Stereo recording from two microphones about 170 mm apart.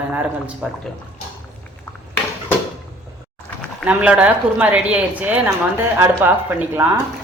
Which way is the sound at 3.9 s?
10° right (ahead or behind).